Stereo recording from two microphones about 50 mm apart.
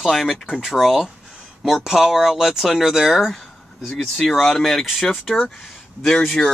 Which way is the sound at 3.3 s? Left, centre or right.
Centre.